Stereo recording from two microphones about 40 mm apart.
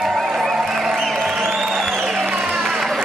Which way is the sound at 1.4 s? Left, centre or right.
Centre.